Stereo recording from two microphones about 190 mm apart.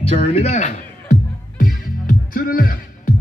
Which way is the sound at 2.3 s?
50° left (ahead or behind).